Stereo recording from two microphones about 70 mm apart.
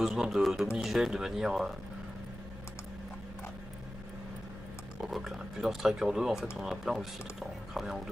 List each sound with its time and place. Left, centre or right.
0.0 s speech: centre
5.1 s speech: centre